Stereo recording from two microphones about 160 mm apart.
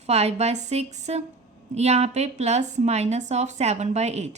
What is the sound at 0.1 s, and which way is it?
A woman's voice, 40° right (ahead or behind).